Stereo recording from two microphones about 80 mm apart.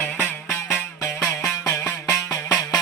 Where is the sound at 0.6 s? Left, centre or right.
Left.